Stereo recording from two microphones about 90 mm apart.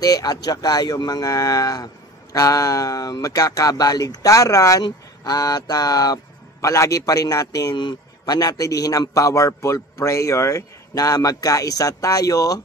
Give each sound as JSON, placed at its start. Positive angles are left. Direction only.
{"t": 0.0, "sound": "a man's voice", "side_deg": 45}
{"t": 7.7, "sound": "a man's voice", "side_deg": 50}